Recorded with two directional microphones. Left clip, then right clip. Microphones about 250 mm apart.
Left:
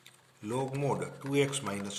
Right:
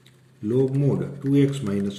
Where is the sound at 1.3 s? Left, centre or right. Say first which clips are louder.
Right 7 dB; left.